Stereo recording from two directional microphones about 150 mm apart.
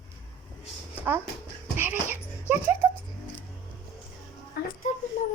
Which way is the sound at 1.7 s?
15° right (ahead or behind).